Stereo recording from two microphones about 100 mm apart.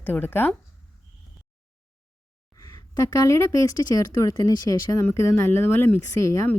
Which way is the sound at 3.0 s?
35° left (ahead or behind).